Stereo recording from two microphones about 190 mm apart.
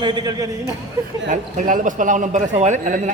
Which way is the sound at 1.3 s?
40° right (ahead or behind).